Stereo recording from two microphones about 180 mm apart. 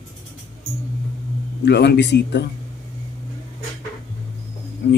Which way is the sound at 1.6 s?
70° left (ahead or behind).